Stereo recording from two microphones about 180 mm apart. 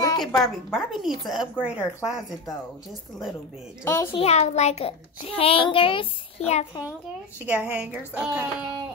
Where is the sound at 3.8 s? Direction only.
15° left (ahead or behind).